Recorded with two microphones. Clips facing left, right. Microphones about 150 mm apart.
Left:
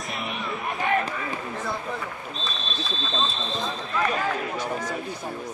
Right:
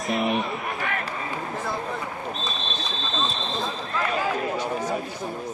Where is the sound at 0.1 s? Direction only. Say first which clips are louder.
Right 10 dB; centre (ahead or behind).